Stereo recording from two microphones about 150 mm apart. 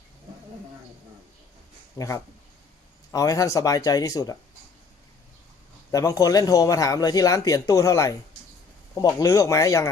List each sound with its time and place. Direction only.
2.0 s speech: 20° left (ahead or behind)
5.9 s speech: 20° left (ahead or behind)